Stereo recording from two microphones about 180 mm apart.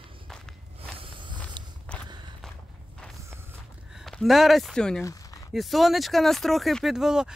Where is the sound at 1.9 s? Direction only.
5° left (ahead or behind).